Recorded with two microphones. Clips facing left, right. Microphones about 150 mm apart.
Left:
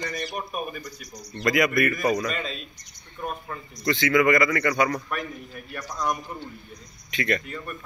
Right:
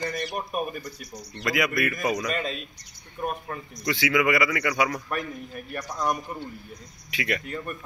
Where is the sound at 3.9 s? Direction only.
10° right (ahead or behind).